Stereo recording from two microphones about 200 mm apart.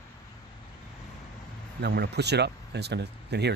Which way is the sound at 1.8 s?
55° right (ahead or behind).